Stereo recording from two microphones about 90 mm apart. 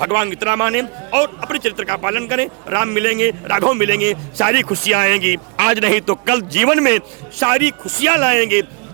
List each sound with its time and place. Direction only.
0.0 s a man's voice: 25° right (ahead or behind)